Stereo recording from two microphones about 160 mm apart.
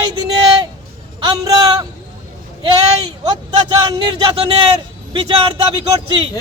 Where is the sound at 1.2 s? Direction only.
25° right (ahead or behind).